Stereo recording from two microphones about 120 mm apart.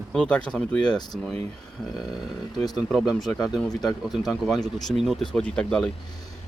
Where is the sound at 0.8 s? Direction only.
35° left (ahead or behind).